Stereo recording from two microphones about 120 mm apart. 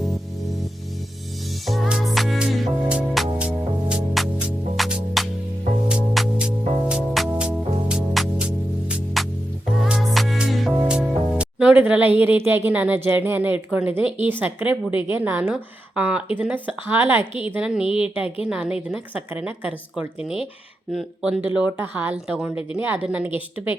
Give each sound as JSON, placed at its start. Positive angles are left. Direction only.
{"t": 1.6, "sound": "music", "side_deg": 0}
{"t": 10.8, "sound": "speech", "side_deg": -10}
{"t": 17.5, "sound": "speech", "side_deg": -10}
{"t": 17.8, "sound": "speech", "side_deg": 50}
{"t": 18.4, "sound": "speech", "side_deg": -5}